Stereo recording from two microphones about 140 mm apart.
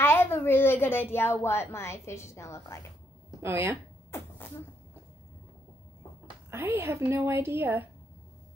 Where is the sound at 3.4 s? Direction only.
15° right (ahead or behind).